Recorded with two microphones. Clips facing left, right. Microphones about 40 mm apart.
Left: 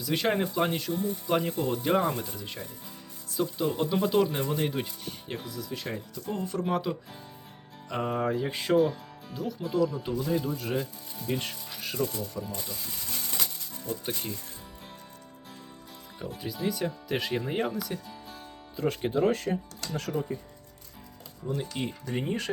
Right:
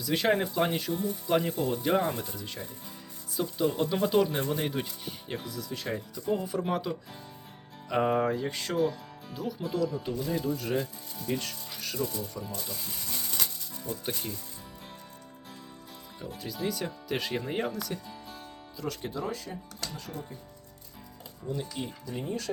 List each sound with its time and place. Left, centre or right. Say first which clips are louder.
0.0 s speech: right 1 dB; centre
7.9 s speech: right 4 dB; centre
8.2 s speech: even; centre
8.4 s speech: left 7 dB; centre
8.8 s speech: left 2 dB; centre
12.2 s speech: left 2 dB; centre
13.1 s a sound: left 1 dB; centre
13.9 s speech: left 2 dB; centre
16.6 s speech: left 2 dB; centre
18.8 s speech: left 7 dB; left
19.2 s speech: left 9 dB; left
21.7 s speech: left 3 dB; left
22.1 s speech: left 4 dB; left